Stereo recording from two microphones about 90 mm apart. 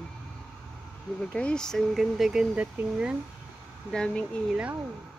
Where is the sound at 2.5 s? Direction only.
15° right (ahead or behind).